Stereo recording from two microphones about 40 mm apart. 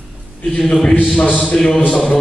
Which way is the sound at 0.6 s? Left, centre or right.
Centre.